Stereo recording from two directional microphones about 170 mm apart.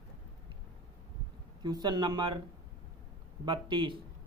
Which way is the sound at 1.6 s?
25° right (ahead or behind).